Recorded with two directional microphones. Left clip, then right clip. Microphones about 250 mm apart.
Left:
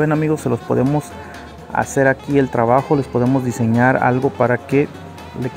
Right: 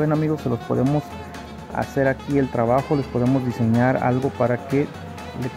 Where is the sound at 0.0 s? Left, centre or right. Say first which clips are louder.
Left 4 dB; centre.